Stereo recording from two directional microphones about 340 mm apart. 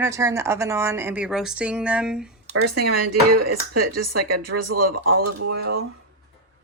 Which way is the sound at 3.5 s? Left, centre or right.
Right.